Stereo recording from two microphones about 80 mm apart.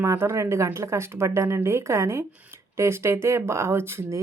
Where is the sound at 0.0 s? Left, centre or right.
Right.